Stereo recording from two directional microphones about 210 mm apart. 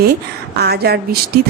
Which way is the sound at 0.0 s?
50° right (ahead or behind).